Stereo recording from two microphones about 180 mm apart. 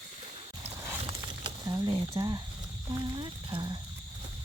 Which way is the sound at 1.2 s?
20° right (ahead or behind).